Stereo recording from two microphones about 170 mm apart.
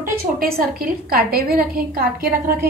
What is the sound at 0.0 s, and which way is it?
A woman's voice, 60° right (ahead or behind).